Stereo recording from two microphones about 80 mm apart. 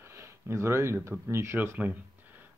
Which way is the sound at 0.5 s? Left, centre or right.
Right.